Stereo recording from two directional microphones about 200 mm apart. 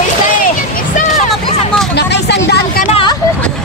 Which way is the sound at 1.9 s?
55° left (ahead or behind).